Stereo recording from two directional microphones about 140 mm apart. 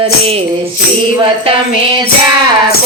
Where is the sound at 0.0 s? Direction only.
45° right (ahead or behind).